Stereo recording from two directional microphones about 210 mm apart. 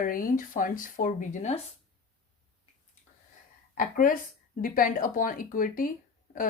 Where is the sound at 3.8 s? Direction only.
40° left (ahead or behind).